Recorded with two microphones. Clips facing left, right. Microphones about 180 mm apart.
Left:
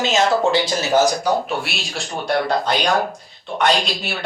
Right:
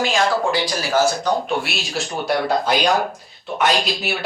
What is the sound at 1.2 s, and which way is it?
Speech, centre (ahead or behind).